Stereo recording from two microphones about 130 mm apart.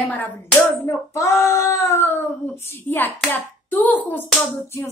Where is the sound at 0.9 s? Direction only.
25° left (ahead or behind).